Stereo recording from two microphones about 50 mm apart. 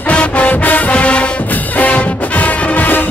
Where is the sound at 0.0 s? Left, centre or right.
Left.